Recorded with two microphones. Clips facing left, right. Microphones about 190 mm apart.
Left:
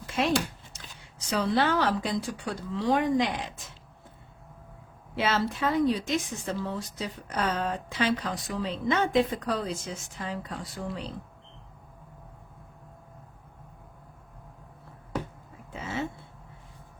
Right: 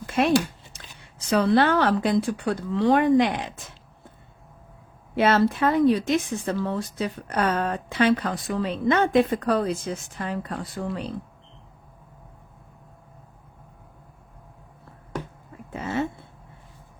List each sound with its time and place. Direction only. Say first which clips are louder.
0.1 s speech: right 6 dB; 60° right (ahead or behind)
5.1 s speech: right 8 dB; 55° right (ahead or behind)
15.7 s a sound: right 6 dB; 55° right (ahead or behind)